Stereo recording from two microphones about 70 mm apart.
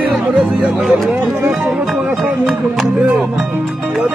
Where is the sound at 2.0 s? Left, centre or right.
Right.